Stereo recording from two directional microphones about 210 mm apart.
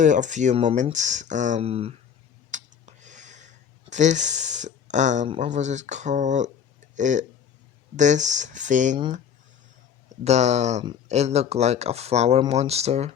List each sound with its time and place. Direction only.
0.0 s speech: 35° right (ahead or behind)
2.5 s a sound: 35° right (ahead or behind)
7.9 s speech: 35° right (ahead or behind)
10.2 s speech: 30° right (ahead or behind)